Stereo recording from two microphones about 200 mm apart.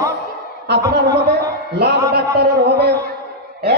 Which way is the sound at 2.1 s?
55° right (ahead or behind).